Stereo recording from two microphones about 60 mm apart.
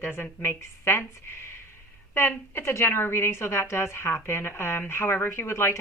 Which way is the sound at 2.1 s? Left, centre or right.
Left.